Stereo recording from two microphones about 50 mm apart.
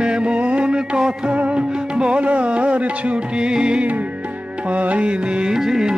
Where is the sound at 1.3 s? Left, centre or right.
Right.